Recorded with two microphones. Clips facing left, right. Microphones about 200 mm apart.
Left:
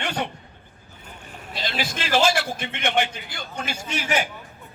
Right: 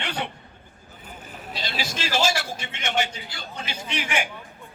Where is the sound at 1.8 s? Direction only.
55° left (ahead or behind).